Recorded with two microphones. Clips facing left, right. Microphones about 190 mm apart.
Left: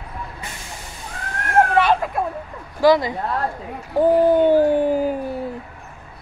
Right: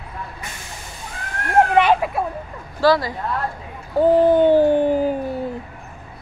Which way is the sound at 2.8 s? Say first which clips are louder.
Left 2 dB; 20° left (ahead or behind).